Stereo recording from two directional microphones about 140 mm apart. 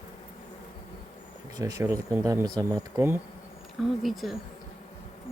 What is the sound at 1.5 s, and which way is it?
Speech, 25° right (ahead or behind).